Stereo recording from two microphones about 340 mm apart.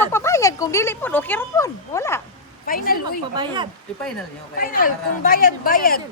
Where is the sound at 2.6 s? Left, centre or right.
Left.